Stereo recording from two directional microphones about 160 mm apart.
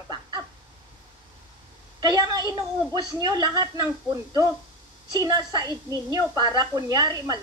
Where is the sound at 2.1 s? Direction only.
25° right (ahead or behind).